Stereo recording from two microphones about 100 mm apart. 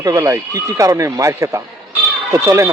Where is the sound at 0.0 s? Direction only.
35° right (ahead or behind).